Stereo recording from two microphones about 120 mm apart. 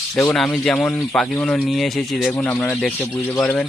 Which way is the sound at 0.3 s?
5° left (ahead or behind).